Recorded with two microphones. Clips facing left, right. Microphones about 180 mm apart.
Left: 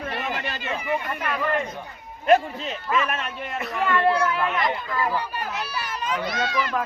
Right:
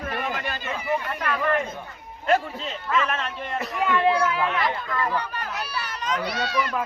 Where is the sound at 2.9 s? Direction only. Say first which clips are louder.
Even; 10° left (ahead or behind).